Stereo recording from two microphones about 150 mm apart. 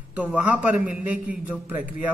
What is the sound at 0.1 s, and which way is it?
A man's voice, 10° right (ahead or behind).